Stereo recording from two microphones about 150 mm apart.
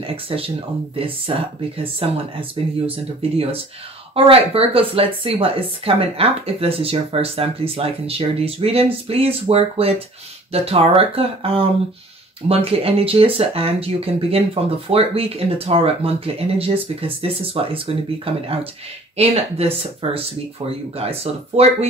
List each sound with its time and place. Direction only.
0.0 s speech: 40° right (ahead or behind)